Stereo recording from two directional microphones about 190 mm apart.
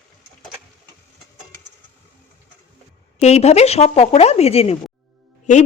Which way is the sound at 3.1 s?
35° left (ahead or behind).